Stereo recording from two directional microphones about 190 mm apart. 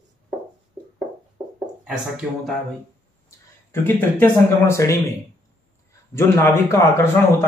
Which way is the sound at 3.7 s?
10° left (ahead or behind).